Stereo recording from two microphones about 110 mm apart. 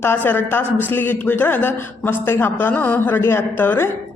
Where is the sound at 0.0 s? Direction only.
20° left (ahead or behind).